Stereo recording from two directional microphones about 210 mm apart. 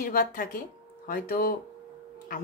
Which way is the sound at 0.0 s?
40° left (ahead or behind).